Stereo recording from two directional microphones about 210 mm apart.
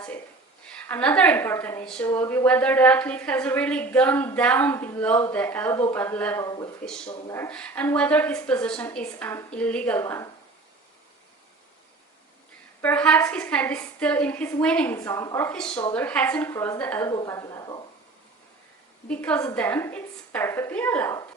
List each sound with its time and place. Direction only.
0.7 s a woman's voice: 5° left (ahead or behind)
6.8 s a woman's voice: 5° left (ahead or behind)
12.8 s a woman's voice: 5° left (ahead or behind)
19.0 s a woman's voice: 5° left (ahead or behind)